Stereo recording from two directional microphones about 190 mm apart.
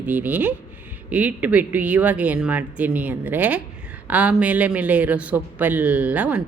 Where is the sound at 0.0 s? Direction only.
10° right (ahead or behind).